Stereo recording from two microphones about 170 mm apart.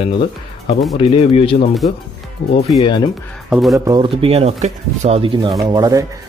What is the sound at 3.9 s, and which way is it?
Speech, 30° right (ahead or behind).